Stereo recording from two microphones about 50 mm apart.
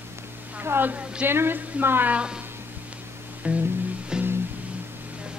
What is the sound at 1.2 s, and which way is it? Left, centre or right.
Speech, right.